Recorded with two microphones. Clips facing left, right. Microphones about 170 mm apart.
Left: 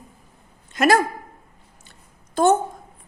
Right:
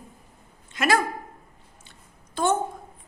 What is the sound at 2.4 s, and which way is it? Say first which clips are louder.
Speech: left 7 dB; 45° left (ahead or behind).